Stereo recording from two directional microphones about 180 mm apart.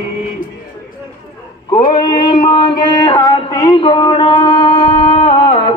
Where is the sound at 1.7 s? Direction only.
25° left (ahead or behind).